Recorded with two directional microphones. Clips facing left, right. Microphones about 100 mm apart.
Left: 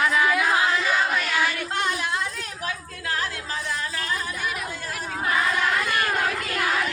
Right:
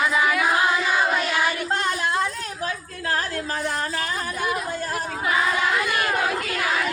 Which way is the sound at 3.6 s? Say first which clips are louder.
Right 3 dB; 50° right (ahead or behind).